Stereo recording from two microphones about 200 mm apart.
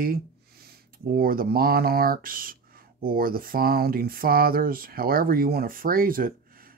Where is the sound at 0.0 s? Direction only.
50° right (ahead or behind).